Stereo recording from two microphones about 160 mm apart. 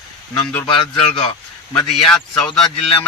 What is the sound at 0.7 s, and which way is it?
Speech, 30° left (ahead or behind).